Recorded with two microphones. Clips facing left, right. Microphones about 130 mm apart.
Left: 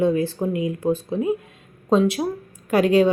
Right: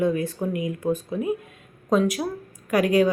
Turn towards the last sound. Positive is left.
turn(degrees=25)  # may be behind; listen again after turning